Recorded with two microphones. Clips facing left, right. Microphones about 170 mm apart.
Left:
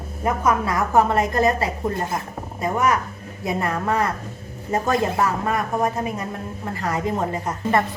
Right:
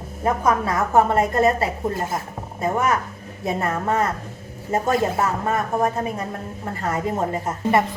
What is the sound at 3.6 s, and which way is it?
Speech, 40° right (ahead or behind).